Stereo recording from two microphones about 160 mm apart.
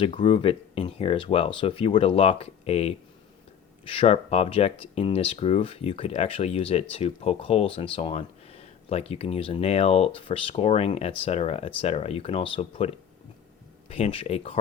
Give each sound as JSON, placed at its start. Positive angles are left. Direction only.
{"t": 0.0, "sound": "speech", "side_deg": 35}